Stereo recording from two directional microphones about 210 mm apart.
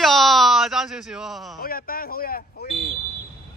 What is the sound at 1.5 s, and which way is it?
Speech, 45° left (ahead or behind).